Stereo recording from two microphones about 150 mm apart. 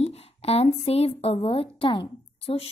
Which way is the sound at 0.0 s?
45° left (ahead or behind).